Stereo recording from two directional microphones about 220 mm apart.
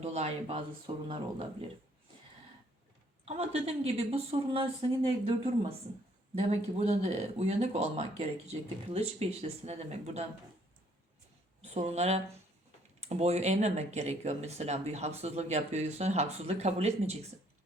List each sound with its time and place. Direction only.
0.0 s speech: 30° right (ahead or behind)
3.2 s speech: 25° right (ahead or behind)
6.7 s speech: 30° right (ahead or behind)
11.6 s speech: 30° right (ahead or behind)